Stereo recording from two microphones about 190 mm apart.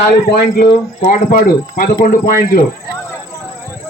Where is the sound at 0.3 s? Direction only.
55° left (ahead or behind).